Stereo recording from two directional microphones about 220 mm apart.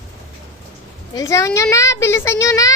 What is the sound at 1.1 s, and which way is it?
Speech, 15° left (ahead or behind).